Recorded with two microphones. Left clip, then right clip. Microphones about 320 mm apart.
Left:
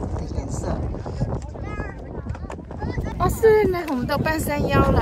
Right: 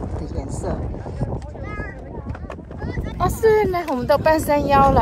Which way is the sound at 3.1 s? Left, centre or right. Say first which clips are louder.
Even; centre.